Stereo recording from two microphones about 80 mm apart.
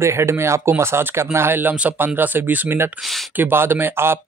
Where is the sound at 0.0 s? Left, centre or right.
Right.